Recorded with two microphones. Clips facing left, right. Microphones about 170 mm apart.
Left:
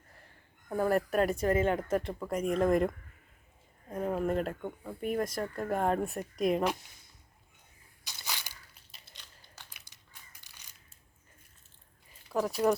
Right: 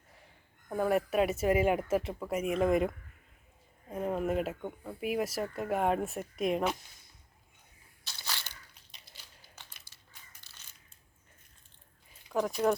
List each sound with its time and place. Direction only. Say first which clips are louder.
0.7 s speech: left 1 dB; centre (ahead or behind)
8.0 s crushing: even; 15° left (ahead or behind)
12.3 s speech: left 1 dB; centre (ahead or behind)